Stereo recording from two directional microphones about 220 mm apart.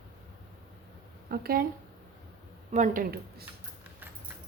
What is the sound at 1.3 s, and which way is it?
Speech, 45° right (ahead or behind).